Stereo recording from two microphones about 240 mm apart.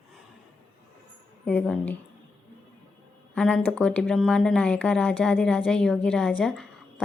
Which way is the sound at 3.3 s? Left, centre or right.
Centre.